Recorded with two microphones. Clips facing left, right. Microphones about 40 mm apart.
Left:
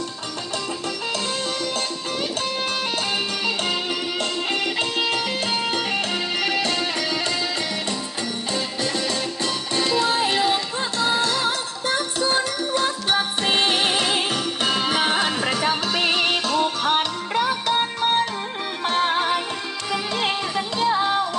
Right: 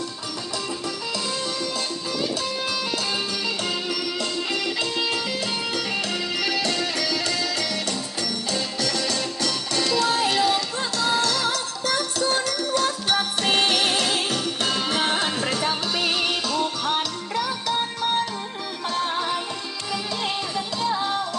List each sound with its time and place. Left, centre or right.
3.1 s music: left
8.5 s music: left
15.6 s music: left